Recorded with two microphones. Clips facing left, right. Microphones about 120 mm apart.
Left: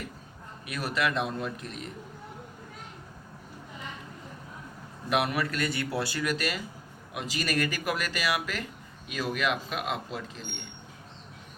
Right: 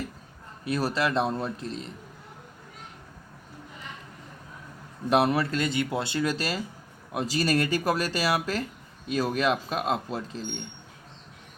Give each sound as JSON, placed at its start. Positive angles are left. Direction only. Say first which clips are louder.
{"t": 0.6, "sound": "speech", "louder": "right 4 dB", "side_deg": -30}
{"t": 5.0, "sound": "speech", "louder": "right 5 dB", "side_deg": -30}